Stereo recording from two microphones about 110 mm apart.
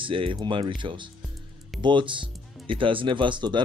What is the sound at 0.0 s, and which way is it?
Speech, 50° right (ahead or behind).